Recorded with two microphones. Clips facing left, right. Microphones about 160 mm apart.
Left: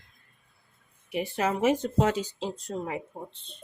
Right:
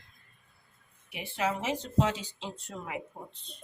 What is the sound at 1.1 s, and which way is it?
Speech, 45° left (ahead or behind).